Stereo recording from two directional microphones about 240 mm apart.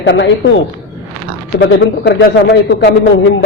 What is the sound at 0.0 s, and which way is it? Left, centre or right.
A man's voice, left.